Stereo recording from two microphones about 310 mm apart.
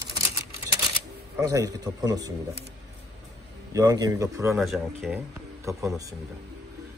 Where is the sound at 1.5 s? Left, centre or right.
Centre.